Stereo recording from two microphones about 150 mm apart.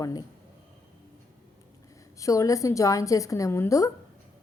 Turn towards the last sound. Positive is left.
turn(degrees=20)  # may be behind; listen again after turning